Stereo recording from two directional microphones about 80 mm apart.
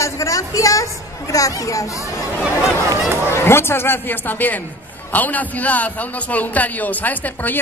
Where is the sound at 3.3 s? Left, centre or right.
Left.